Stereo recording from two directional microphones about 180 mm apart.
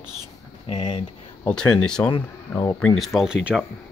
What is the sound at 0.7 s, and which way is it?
Speech, 25° left (ahead or behind).